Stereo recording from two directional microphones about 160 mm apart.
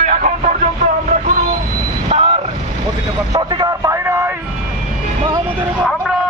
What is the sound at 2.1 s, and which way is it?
Vehicle, 45° right (ahead or behind).